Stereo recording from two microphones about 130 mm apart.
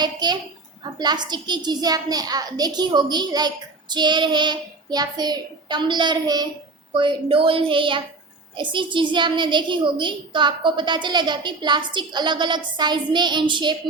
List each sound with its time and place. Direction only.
0.0 s a sound: 35° right (ahead or behind)
0.9 s a child's voice: 35° right (ahead or behind)
6.9 s a child's voice: 40° right (ahead or behind)